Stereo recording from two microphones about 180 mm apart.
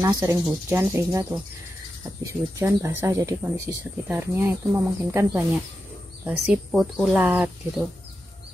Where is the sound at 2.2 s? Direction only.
15° right (ahead or behind).